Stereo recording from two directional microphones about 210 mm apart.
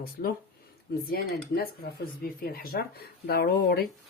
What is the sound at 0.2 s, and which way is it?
Speech, 45° left (ahead or behind).